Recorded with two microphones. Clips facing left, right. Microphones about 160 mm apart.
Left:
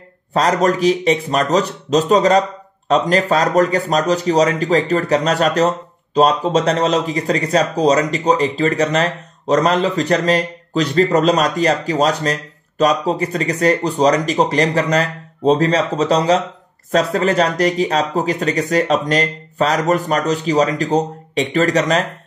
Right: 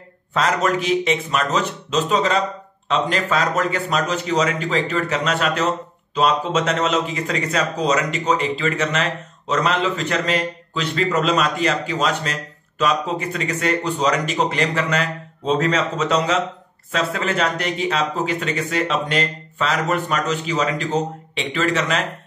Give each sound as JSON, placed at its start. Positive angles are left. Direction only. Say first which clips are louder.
{"t": 0.3, "sound": "speech", "louder": "left 4 dB", "side_deg": 35}